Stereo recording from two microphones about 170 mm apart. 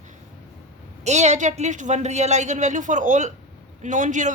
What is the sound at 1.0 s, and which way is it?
A woman's voice, 40° right (ahead or behind).